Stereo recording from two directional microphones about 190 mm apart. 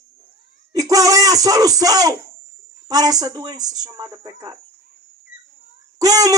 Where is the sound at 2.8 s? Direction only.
20° right (ahead or behind).